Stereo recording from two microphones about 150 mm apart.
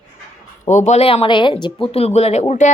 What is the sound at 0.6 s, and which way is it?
Speech, 50° left (ahead or behind).